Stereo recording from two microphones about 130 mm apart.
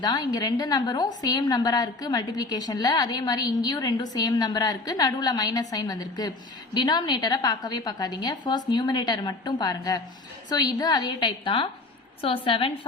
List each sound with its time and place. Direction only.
0.0 s a woman's voice: 30° left (ahead or behind)